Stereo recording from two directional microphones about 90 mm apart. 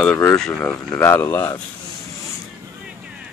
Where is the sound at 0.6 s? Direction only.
25° left (ahead or behind).